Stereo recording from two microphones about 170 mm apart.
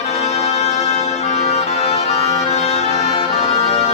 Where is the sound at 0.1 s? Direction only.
40° left (ahead or behind).